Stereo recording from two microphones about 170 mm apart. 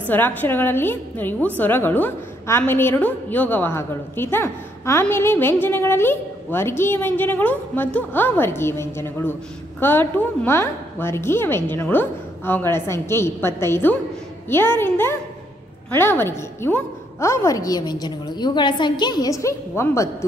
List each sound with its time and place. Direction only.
0.1 s a woman's voice: 10° left (ahead or behind)